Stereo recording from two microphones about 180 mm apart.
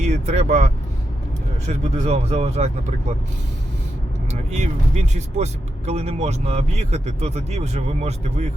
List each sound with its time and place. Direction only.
0.0 s speech: 40° right (ahead or behind)
4.3 s speech: 40° right (ahead or behind)